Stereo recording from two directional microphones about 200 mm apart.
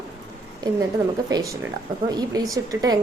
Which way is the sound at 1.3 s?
20° right (ahead or behind).